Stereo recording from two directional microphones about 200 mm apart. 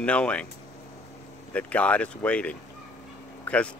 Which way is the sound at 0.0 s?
5° left (ahead or behind).